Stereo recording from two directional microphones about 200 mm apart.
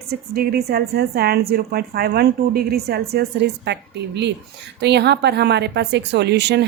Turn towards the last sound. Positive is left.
turn(degrees=-60)  # may be behind; listen again after turning